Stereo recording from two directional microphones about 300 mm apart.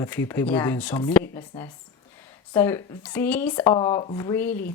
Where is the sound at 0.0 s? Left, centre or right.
Centre.